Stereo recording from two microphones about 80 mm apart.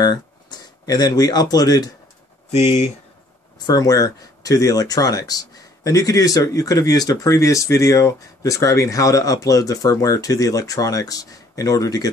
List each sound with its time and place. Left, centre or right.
0.0 s speech: left
3.5 s speech: left